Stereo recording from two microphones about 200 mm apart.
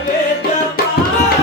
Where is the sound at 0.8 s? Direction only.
50° left (ahead or behind).